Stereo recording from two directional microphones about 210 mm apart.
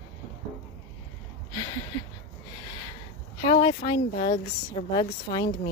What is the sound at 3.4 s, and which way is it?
Speech, 25° left (ahead or behind).